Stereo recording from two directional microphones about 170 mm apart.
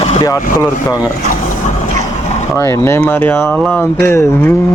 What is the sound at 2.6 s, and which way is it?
Speech, 15° left (ahead or behind).